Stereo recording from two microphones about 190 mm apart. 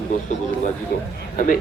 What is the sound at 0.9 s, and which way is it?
Speech, 55° left (ahead or behind).